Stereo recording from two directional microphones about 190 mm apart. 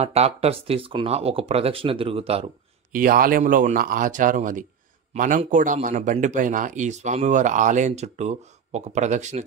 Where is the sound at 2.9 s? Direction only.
45° right (ahead or behind).